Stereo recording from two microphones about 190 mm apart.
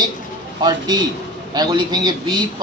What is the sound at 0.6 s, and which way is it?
A man's voice, 20° right (ahead or behind).